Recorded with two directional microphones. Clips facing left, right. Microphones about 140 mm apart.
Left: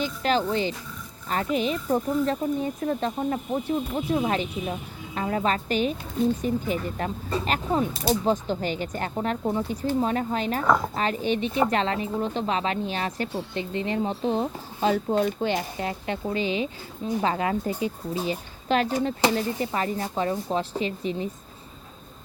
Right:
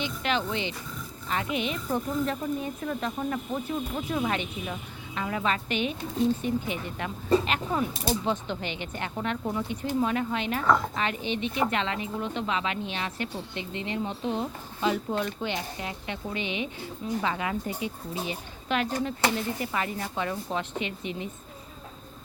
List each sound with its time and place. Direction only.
0.0 s speech: 40° left (ahead or behind)
9.4 s speech: 30° left (ahead or behind)